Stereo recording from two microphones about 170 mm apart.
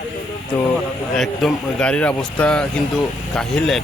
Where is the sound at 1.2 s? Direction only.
5° left (ahead or behind).